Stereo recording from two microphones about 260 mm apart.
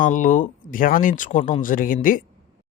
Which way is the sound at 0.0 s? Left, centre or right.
Left.